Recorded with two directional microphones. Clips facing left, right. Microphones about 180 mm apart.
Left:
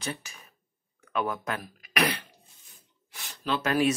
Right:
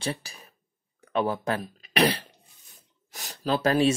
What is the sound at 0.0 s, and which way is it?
Speech, 35° right (ahead or behind).